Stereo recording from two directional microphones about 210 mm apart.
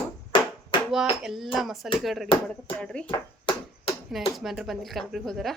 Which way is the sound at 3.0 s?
25° left (ahead or behind).